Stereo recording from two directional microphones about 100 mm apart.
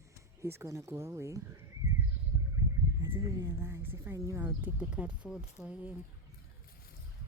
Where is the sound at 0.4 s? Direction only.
25° right (ahead or behind).